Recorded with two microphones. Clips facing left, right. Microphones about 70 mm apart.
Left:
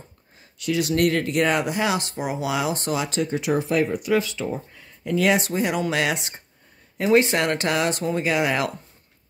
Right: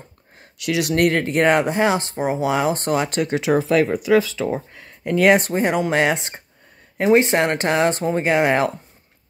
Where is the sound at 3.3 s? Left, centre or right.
Right.